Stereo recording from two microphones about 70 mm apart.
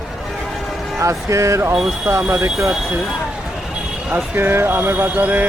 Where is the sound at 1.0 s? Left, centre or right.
Right.